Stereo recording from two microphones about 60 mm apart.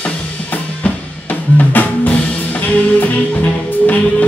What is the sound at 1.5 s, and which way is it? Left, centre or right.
Drum kit, left.